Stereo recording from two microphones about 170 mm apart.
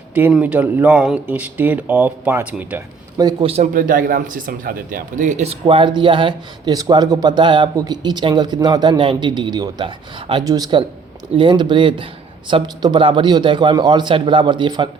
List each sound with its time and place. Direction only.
0.1 s speech: 5° right (ahead or behind)
3.4 s speech: 40° right (ahead or behind)
3.8 s speech: 55° right (ahead or behind); by 14.8 s 25° right (ahead or behind)